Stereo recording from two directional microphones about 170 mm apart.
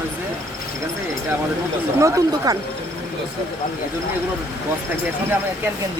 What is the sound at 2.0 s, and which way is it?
Speech, 20° right (ahead or behind).